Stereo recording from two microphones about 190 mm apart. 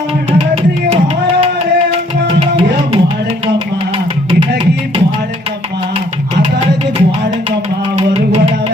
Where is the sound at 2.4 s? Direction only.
30° right (ahead or behind).